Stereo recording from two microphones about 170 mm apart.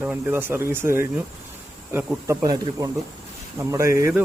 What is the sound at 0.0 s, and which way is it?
Speech, 10° right (ahead or behind).